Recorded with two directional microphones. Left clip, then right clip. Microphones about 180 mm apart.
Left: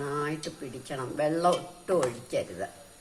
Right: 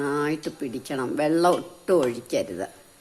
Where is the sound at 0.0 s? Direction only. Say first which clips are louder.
Right 6 dB; 60° right (ahead or behind).